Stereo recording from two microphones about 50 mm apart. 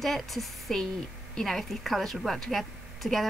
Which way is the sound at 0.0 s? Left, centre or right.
Centre.